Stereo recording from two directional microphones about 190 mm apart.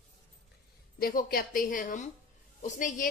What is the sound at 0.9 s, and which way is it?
A woman's voice, 50° left (ahead or behind).